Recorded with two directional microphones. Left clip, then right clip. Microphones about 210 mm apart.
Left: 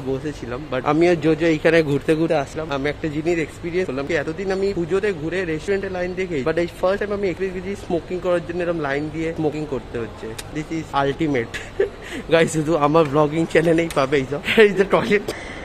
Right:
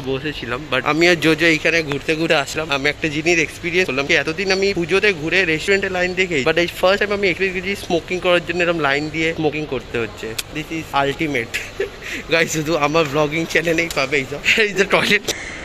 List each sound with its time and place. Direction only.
0.1 s speech: 5° left (ahead or behind); by 2.1 s 25° left (ahead or behind)
2.2 s speech: 5° left (ahead or behind)
10.9 s speech: 10° left (ahead or behind)
13.9 s speech: 30° left (ahead or behind); by 15.3 s 5° left (ahead or behind)